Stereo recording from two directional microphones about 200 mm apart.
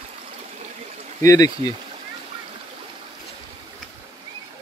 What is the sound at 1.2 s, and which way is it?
Speech, 20° left (ahead or behind).